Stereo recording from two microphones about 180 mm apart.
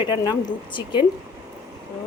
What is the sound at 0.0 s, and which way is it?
Speech, 15° right (ahead or behind).